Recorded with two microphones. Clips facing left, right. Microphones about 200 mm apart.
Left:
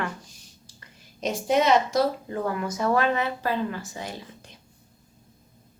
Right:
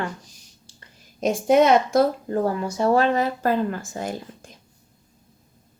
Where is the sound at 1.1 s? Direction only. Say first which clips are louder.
Right 6 dB; 50° right (ahead or behind).